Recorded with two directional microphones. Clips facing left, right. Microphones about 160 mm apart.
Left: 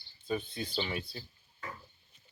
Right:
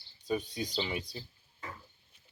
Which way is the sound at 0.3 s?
15° right (ahead or behind).